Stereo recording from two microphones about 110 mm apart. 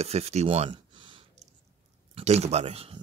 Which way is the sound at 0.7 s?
45° right (ahead or behind).